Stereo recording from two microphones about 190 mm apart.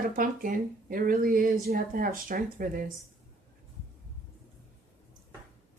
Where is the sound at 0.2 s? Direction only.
45° right (ahead or behind).